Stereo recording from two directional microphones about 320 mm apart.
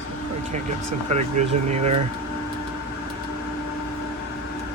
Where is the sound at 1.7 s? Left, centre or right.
Centre.